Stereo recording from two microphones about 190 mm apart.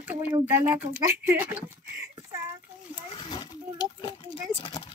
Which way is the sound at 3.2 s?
25° left (ahead or behind).